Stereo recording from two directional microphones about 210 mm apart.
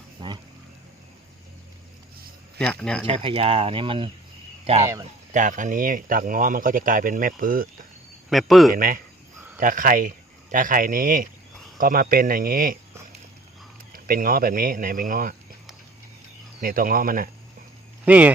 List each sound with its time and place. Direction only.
0.2 s a sound: 25° right (ahead or behind)
2.6 s speech: 5° left (ahead or behind)
3.1 s speech: 25° right (ahead or behind)
4.8 s speech: 15° right (ahead or behind)
5.3 s a man's voice: 35° right (ahead or behind)
8.3 s speech: centre (ahead or behind)
8.7 s speech: 40° right (ahead or behind)
13.9 s a man's voice: 40° right (ahead or behind)
16.6 s speech: 40° right (ahead or behind)
18.0 s speech: 5° right (ahead or behind)